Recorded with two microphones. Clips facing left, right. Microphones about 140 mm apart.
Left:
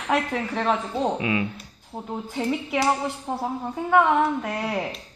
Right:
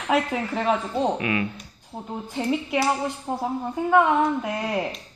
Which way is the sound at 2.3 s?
Centre (ahead or behind).